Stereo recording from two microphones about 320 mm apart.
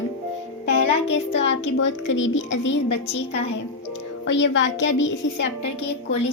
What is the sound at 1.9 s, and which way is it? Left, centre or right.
Speech, left.